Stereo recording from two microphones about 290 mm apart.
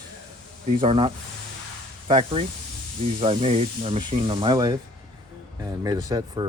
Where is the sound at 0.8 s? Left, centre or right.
Centre.